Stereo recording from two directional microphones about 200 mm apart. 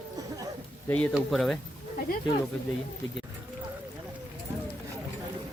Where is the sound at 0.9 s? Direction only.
5° left (ahead or behind).